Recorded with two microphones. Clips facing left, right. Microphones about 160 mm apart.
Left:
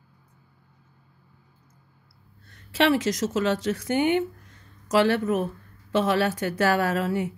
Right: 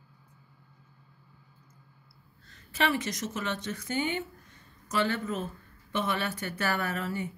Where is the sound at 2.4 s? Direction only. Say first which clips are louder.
Left 7 dB; 70° left (ahead or behind).